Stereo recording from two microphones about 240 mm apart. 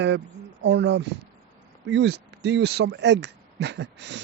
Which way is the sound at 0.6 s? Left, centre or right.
Right.